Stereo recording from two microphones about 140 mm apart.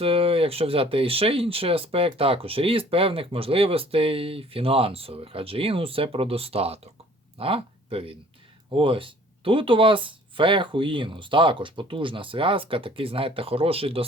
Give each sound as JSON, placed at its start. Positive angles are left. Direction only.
{"t": 0.0, "sound": "speech", "side_deg": -40}